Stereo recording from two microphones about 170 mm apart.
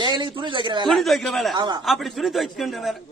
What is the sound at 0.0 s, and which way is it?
Speech, 25° right (ahead or behind).